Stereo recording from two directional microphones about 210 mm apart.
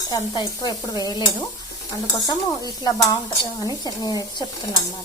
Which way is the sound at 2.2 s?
20° left (ahead or behind).